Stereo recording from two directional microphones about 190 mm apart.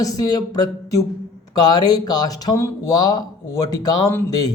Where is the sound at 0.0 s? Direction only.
20° left (ahead or behind).